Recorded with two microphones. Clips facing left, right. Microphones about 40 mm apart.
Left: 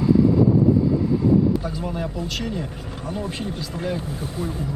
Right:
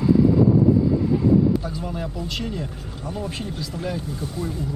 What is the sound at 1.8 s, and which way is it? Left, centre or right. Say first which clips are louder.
Speech: left 2 dB; centre.